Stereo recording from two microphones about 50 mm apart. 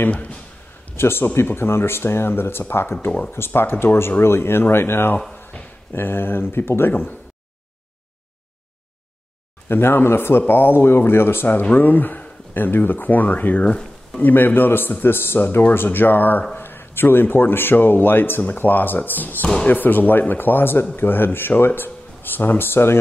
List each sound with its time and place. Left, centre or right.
0.0 s a man's voice: left
0.9 s speech: left
9.7 s speech: left
11.7 s speech: left
13.7 s a sound: centre
14.2 s speech: left